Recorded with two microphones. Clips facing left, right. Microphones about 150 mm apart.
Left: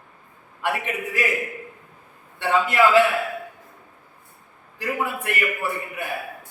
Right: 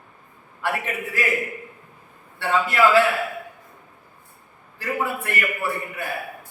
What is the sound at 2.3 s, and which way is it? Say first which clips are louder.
Speech: left 1 dB; 15° left (ahead or behind).